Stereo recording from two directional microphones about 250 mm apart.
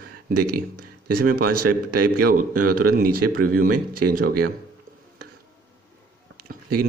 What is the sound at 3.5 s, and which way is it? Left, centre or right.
Speech, right.